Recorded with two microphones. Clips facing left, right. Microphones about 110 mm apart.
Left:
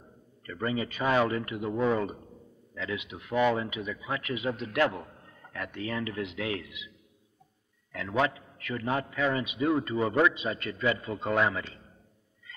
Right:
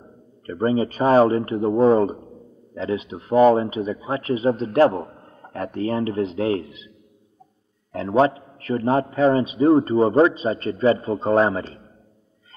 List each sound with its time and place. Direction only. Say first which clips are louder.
0.0 s speech: right 10 dB; 35° right (ahead or behind)
7.9 s speech: right 10 dB; 35° right (ahead or behind)